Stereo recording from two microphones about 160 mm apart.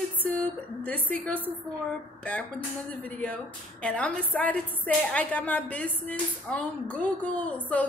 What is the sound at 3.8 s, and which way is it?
A woman's voice, 5° left (ahead or behind).